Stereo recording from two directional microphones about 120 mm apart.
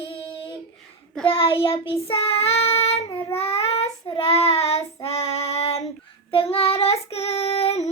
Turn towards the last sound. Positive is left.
turn(degrees=60)  # may be behind; listen again after turning